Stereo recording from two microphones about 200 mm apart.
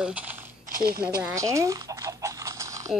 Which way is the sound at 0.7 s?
50° right (ahead or behind).